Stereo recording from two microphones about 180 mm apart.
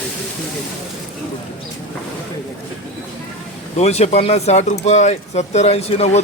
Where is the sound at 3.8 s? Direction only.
35° left (ahead or behind).